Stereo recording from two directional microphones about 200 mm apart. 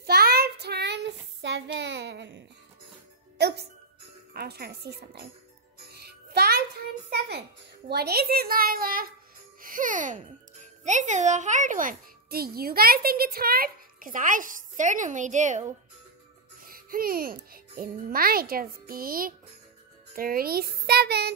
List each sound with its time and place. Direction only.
0.0 s child singing: 50° right (ahead or behind)
3.3 s a child's voice: 55° right (ahead or behind)
5.9 s music: 50° right (ahead or behind)
7.9 s a child's voice: 50° right (ahead or behind)
16.6 s a child's voice: 45° right (ahead or behind)